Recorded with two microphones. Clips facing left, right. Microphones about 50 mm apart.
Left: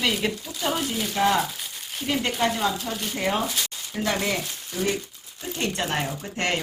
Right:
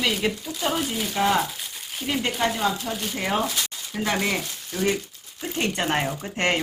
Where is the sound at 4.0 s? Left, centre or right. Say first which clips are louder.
Right 1 dB; centre.